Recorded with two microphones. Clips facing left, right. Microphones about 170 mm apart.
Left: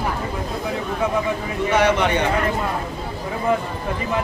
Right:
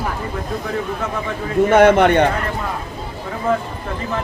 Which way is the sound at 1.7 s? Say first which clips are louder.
Right 6 dB; 55° right (ahead or behind).